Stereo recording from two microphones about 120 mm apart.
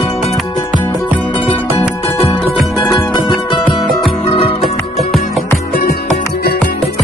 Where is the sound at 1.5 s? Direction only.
55° left (ahead or behind).